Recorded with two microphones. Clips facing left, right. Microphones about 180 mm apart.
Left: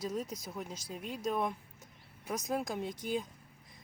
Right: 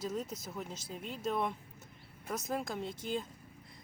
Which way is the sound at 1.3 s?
10° left (ahead or behind).